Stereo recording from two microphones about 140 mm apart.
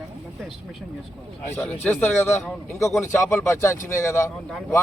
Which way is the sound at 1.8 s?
15° left (ahead or behind).